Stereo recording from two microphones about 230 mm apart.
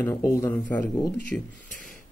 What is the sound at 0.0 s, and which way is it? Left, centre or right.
Speech, centre.